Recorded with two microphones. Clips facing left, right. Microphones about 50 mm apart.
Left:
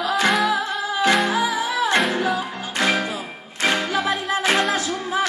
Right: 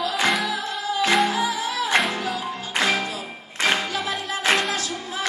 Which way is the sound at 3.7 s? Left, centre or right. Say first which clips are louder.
Left 3 dB; left.